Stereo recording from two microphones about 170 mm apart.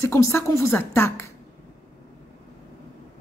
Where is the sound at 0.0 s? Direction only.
15° left (ahead or behind).